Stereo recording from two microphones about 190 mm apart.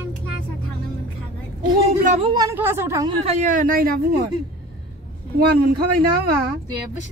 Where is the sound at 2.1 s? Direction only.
25° right (ahead or behind).